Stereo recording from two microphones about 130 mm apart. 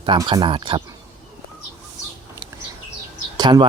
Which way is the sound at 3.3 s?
35° right (ahead or behind).